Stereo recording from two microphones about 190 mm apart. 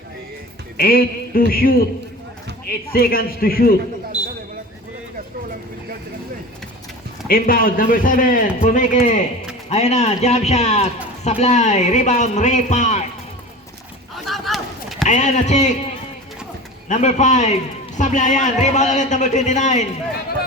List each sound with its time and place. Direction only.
0.8 s a man's voice: 50° left (ahead or behind)
2.9 s a man's voice: 50° left (ahead or behind)
4.1 s a sound: 5° right (ahead or behind)
7.3 s a man's voice: 50° left (ahead or behind)
14.3 s chop: centre (ahead or behind)
15.0 s a man's voice: 40° left (ahead or behind)
16.9 s a man's voice: 40° left (ahead or behind)